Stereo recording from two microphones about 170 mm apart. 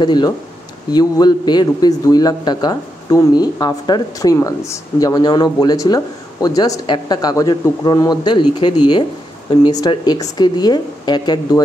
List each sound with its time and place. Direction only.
0.0 s a man's voice: 25° left (ahead or behind)